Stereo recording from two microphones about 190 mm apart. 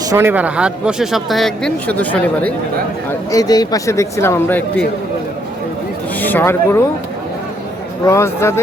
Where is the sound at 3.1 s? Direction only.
20° left (ahead or behind).